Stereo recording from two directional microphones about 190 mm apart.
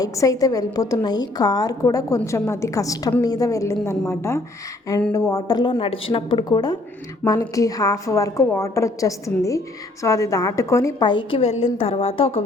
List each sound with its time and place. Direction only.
0.0 s a woman's voice: 20° left (ahead or behind)